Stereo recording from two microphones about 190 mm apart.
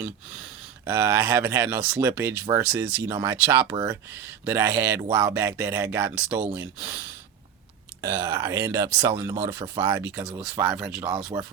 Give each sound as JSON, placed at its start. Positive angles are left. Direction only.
{"t": 0.9, "sound": "speech", "side_deg": -15}
{"t": 8.0, "sound": "speech", "side_deg": -15}